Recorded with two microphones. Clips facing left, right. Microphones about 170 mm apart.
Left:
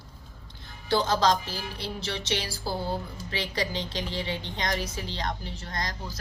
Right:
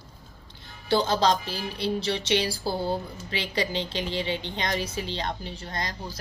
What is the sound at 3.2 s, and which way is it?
A woman's voice, 25° right (ahead or behind).